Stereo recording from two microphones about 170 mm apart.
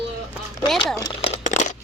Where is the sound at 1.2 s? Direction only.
40° left (ahead or behind).